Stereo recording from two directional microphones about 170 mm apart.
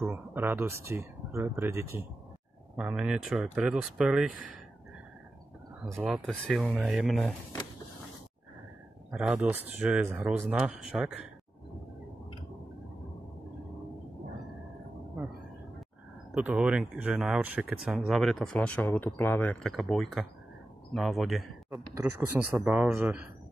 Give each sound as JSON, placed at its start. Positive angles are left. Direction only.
{"t": 0.0, "sound": "speech", "side_deg": -10}
{"t": 5.9, "sound": "speech", "side_deg": -15}
{"t": 6.1, "sound": "speech", "side_deg": 0}
{"t": 9.1, "sound": "speech", "side_deg": -5}
{"t": 16.3, "sound": "speech", "side_deg": -5}
{"t": 21.9, "sound": "speech", "side_deg": -10}